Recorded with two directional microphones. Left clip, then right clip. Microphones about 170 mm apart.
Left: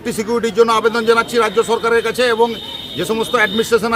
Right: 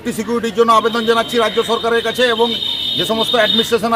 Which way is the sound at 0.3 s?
15° left (ahead or behind).